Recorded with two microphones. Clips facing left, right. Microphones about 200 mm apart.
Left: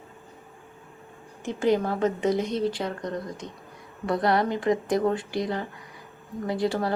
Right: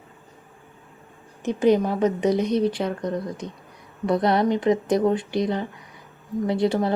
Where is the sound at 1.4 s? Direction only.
20° right (ahead or behind).